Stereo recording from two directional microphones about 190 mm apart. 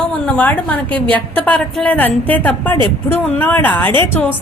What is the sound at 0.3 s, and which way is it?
A woman's voice, 5° left (ahead or behind).